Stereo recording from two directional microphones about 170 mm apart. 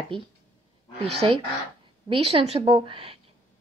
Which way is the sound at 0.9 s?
35° right (ahead or behind).